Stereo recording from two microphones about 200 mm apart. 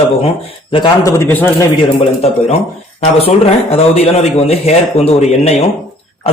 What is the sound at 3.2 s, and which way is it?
Speech, 30° left (ahead or behind).